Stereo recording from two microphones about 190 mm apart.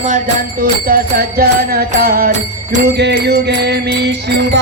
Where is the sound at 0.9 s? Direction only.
50° right (ahead or behind).